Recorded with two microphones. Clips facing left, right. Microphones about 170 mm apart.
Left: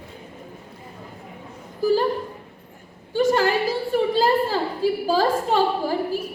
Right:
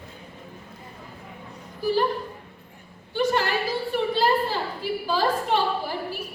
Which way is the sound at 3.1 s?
45° left (ahead or behind).